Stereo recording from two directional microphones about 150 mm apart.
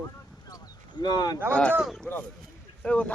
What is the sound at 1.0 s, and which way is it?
Speech, 30° left (ahead or behind).